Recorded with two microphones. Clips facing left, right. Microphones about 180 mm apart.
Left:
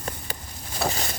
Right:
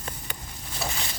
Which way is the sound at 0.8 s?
40° left (ahead or behind).